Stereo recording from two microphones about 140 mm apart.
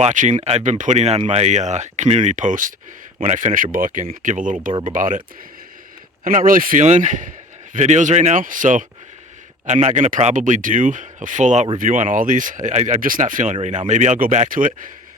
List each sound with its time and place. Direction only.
0.0 s a man's voice: 60° right (ahead or behind)
6.2 s a man's voice: 80° right; by 11.7 s 55° right (ahead or behind)
11.8 s a man's voice: 70° right (ahead or behind)